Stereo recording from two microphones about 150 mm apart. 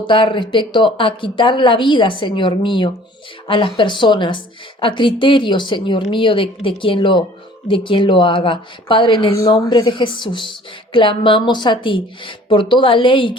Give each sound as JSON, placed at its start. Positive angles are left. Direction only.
{"t": 0.1, "sound": "speech", "side_deg": 35}